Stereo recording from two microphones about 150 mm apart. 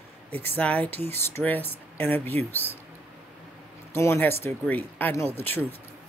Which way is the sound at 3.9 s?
15° left (ahead or behind).